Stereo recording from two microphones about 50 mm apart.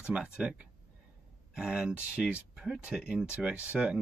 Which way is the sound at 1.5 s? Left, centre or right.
Centre.